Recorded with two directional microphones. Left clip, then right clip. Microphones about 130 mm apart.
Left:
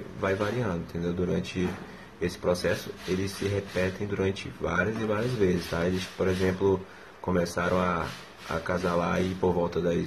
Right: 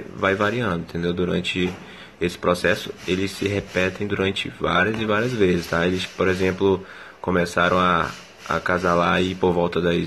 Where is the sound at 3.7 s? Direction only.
30° right (ahead or behind).